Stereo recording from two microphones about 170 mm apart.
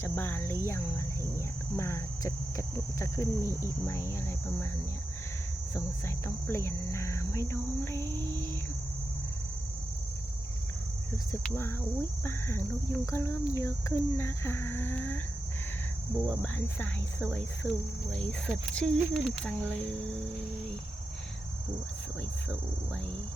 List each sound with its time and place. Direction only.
0.0 s speech: 15° left (ahead or behind)
5.7 s speech: 15° left (ahead or behind)
8.2 s a sound: 20° right (ahead or behind)
11.4 s speech: 15° left (ahead or behind)
16.2 s speech: 5° left (ahead or behind)